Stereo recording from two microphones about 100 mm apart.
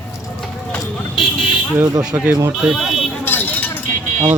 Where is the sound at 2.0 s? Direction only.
15° right (ahead or behind).